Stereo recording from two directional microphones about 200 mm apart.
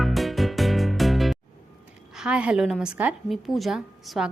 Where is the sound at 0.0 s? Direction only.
Centre (ahead or behind).